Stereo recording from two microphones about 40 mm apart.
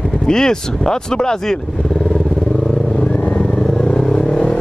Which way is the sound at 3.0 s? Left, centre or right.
Left.